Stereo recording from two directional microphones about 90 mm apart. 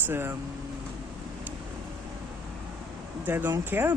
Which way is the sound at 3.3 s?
25° right (ahead or behind).